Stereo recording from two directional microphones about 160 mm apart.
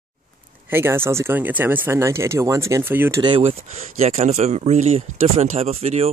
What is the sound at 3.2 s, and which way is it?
Speech, 30° right (ahead or behind).